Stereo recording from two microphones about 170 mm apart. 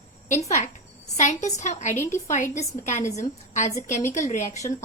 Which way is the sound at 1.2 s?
45° left (ahead or behind).